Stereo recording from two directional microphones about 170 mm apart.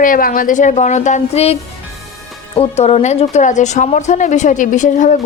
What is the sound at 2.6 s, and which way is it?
A woman's voice, 40° left (ahead or behind).